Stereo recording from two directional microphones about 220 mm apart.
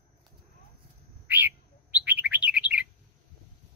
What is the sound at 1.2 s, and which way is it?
Bird, 10° right (ahead or behind).